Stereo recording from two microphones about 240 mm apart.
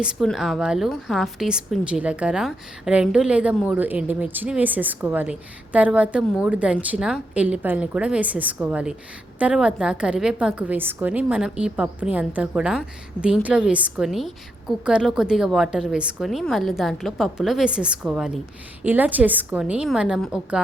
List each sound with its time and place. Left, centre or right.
0.0 s a woman's voice: centre